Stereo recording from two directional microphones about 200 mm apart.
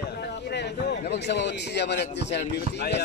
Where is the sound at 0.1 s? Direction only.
55° left (ahead or behind).